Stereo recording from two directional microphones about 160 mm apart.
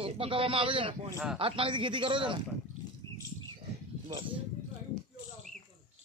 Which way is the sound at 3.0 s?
20° left (ahead or behind).